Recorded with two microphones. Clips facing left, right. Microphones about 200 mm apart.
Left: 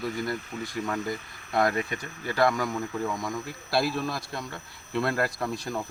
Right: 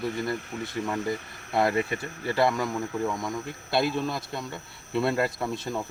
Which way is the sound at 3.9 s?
25° right (ahead or behind).